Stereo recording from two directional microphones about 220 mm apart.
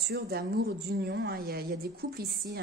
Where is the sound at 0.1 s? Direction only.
45° right (ahead or behind).